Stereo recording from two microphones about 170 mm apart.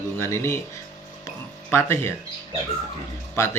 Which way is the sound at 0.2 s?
15° left (ahead or behind).